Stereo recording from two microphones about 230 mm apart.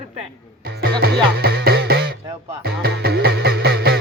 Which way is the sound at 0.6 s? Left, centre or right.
Right.